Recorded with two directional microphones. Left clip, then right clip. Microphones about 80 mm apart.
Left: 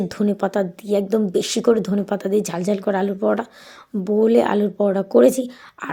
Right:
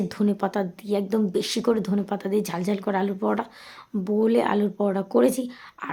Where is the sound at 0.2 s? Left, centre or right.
Left.